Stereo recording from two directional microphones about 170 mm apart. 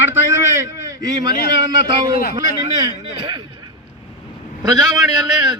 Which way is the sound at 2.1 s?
60° left (ahead or behind).